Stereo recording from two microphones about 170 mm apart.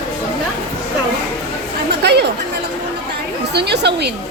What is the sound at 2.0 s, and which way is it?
Chatter, 80° right.